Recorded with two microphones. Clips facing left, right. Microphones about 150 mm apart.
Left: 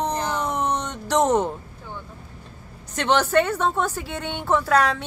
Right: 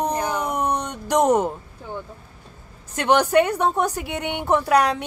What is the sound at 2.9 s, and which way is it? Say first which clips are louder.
A woman's voice: right 2 dB; 10° right (ahead or behind).